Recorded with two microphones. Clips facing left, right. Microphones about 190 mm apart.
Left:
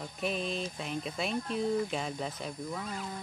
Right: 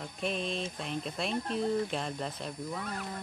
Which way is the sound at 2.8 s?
60° right (ahead or behind).